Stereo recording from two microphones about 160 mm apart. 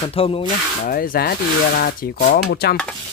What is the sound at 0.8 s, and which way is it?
Speech, 65° left (ahead or behind).